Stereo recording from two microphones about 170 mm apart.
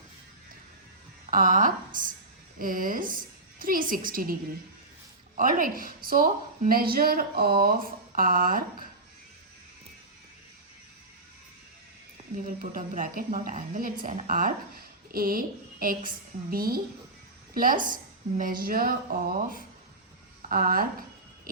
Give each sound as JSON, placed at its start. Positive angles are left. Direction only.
{"t": 1.3, "sound": "a woman's voice", "side_deg": -55}
{"t": 5.4, "sound": "a woman's voice", "side_deg": -55}
{"t": 12.5, "sound": "a woman's voice", "side_deg": -50}